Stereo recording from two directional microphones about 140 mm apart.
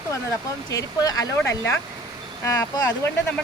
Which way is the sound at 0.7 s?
25° left (ahead or behind).